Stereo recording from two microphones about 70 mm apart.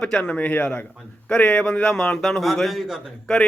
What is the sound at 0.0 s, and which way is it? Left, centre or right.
Speech, centre.